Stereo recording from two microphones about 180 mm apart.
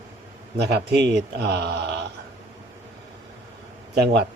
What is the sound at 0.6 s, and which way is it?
A man's voice, 65° right (ahead or behind).